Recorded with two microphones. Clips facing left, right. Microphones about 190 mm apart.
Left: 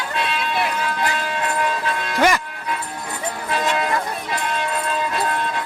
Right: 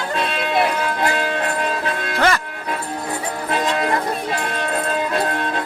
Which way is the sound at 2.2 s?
15° left (ahead or behind).